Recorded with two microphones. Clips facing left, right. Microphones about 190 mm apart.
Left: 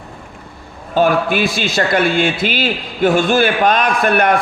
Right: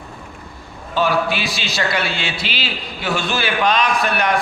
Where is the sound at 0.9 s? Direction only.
50° left (ahead or behind).